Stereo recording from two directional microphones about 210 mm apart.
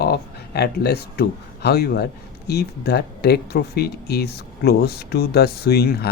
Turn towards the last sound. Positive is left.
turn(degrees=50)  # may be behind; listen again after turning